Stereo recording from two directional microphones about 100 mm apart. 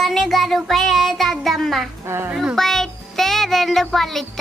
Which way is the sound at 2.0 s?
25° right (ahead or behind).